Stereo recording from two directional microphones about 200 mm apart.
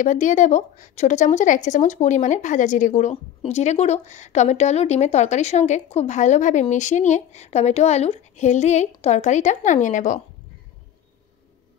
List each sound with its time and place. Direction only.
0.0 s a woman's voice: 40° left (ahead or behind)